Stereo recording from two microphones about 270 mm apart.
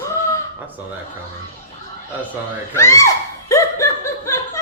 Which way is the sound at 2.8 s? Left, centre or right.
Centre.